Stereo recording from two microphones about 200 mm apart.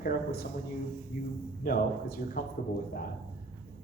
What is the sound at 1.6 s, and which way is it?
Speech, 45° left (ahead or behind).